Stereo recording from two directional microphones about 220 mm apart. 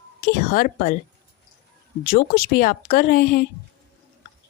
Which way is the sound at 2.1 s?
45° left (ahead or behind).